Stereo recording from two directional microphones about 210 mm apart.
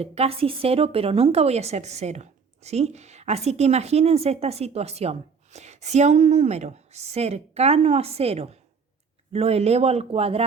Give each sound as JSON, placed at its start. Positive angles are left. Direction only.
{"t": 0.0, "sound": "a woman's voice", "side_deg": -30}